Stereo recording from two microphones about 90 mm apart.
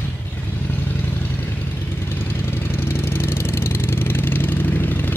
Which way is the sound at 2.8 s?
25° left (ahead or behind).